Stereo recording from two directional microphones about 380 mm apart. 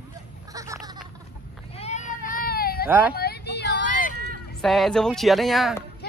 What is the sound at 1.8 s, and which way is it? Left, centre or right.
Cat, centre.